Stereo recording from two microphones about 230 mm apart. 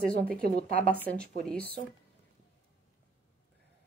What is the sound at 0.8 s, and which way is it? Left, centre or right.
Speech, centre.